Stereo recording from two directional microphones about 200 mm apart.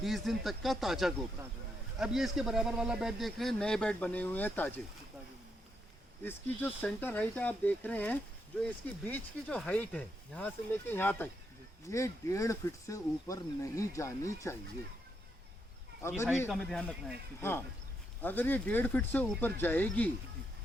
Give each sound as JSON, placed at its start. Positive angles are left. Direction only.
{"t": 0.0, "sound": "speech", "side_deg": 0}
{"t": 6.2, "sound": "speech", "side_deg": 10}
{"t": 16.0, "sound": "speech", "side_deg": 10}
{"t": 16.5, "sound": "speech", "side_deg": 0}
{"t": 18.2, "sound": "speech", "side_deg": 10}